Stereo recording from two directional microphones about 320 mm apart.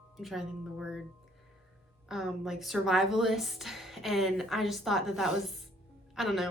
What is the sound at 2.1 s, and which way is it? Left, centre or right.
A woman's voice, centre.